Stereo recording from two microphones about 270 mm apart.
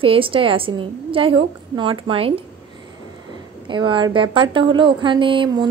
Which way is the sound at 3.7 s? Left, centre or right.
Centre.